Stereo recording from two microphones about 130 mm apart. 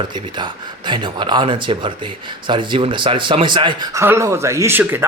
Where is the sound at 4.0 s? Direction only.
20° right (ahead or behind).